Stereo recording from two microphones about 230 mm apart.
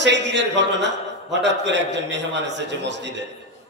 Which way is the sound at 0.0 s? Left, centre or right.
Right.